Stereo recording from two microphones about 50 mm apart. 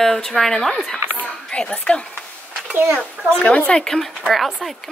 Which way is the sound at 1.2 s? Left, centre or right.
Centre.